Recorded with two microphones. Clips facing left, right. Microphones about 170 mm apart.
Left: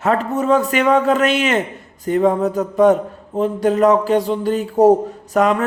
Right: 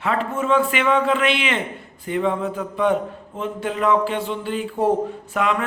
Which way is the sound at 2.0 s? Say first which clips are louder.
Left 6 dB; 40° left (ahead or behind).